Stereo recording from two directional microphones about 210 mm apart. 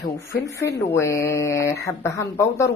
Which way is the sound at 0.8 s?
15° left (ahead or behind).